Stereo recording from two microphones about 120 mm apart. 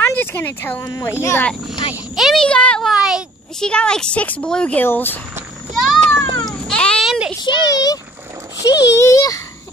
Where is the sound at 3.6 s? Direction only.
5° left (ahead or behind).